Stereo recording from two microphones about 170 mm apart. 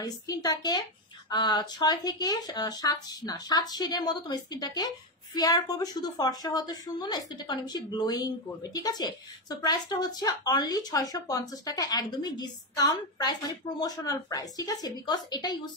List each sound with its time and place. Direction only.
0.0 s speech: 20° left (ahead or behind)